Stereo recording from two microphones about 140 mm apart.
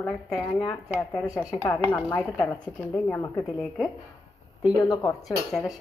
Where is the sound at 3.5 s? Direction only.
Centre (ahead or behind).